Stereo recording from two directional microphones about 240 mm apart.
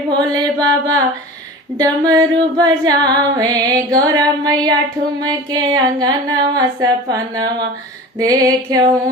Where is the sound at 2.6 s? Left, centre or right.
Centre.